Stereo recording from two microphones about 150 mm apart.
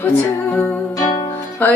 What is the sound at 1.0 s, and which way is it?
Music, 25° left (ahead or behind).